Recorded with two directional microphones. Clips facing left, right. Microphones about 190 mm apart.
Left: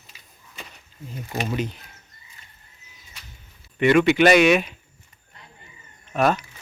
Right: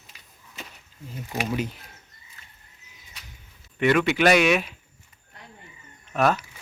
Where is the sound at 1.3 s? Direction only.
5° right (ahead or behind).